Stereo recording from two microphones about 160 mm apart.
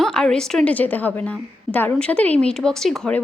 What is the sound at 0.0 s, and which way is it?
A woman's voice, 5° left (ahead or behind).